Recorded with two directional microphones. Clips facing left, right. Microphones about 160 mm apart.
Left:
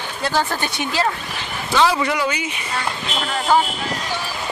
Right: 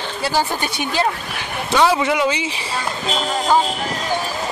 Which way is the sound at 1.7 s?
20° right (ahead or behind).